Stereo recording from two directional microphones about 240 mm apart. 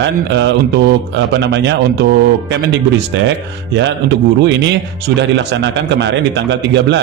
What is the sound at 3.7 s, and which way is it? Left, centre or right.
A man's voice, right.